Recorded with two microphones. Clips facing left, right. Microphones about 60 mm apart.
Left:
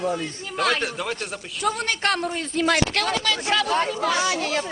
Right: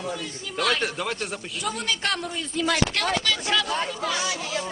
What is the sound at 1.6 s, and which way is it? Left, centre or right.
A woman's voice, left.